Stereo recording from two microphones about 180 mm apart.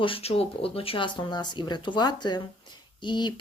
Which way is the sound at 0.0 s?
30° left (ahead or behind).